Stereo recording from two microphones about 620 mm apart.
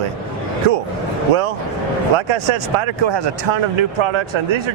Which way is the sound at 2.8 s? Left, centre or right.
Right.